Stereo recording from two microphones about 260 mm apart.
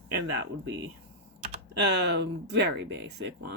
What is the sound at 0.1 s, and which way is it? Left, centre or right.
Speech, right.